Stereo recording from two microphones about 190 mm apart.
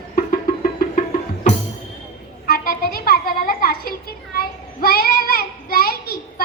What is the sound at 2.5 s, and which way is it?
Music, 50° left (ahead or behind).